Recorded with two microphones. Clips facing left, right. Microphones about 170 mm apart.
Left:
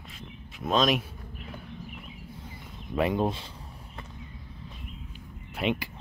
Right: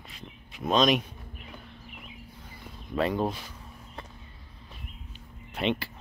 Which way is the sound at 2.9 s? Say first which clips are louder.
Left 1 dB; 15° left (ahead or behind).